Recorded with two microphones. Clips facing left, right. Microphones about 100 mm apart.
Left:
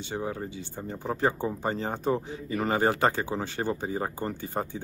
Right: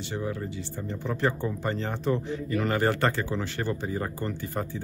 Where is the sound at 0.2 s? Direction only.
30° left (ahead or behind).